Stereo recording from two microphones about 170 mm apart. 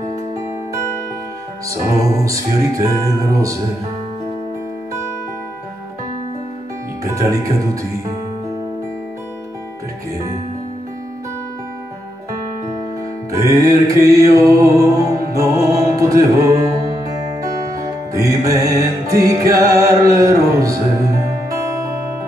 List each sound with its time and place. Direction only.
1.7 s music: 20° right (ahead or behind)
7.1 s music: 20° right (ahead or behind)
13.3 s music: 20° right (ahead or behind)